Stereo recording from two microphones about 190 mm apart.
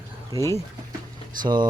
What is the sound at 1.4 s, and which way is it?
Speech, 25° right (ahead or behind).